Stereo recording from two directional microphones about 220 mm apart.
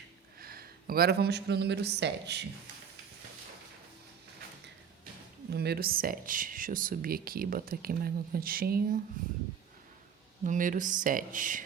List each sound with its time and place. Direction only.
0.3 s speech: 45° right (ahead or behind)
5.5 s speech: 45° right (ahead or behind)
10.4 s speech: 35° right (ahead or behind)